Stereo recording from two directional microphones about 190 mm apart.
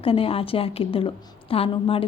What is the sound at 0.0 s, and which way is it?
A woman's voice, 30° left (ahead or behind).